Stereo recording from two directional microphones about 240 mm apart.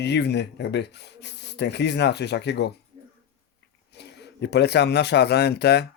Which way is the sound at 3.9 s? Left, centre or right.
Left.